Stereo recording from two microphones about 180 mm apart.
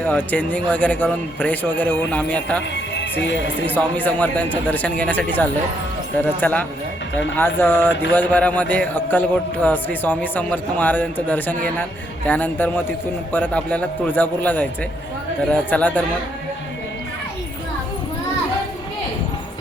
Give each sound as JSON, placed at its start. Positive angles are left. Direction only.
{"t": 0.0, "sound": "a man's voice", "side_deg": 10}
{"t": 2.7, "sound": "speech", "side_deg": 80}
{"t": 3.7, "sound": "a man's voice", "side_deg": 10}